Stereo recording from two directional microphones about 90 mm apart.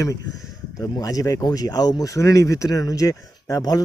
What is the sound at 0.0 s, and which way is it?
Speech, 40° left (ahead or behind).